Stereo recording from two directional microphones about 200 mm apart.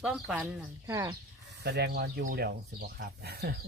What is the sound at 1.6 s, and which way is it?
Speech, 55° right (ahead or behind).